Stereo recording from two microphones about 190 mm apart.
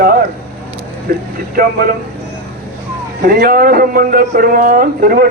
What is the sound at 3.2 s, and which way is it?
Speech, 50° right (ahead or behind).